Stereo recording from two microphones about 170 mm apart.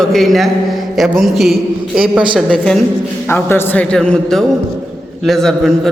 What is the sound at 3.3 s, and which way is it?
A man's voice, 15° left (ahead or behind).